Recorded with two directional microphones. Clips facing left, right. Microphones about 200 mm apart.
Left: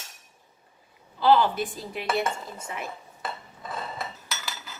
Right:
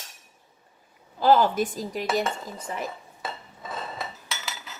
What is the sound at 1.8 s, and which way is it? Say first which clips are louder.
Dishes: right 2 dB; 40° right (ahead or behind).